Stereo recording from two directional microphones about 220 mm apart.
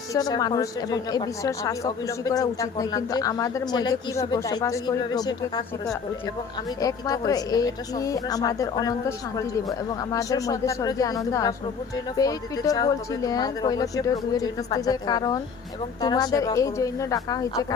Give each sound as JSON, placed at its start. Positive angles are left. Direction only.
{"t": 0.1, "sound": "speech", "side_deg": 15}
{"t": 6.8, "sound": "speech", "side_deg": 15}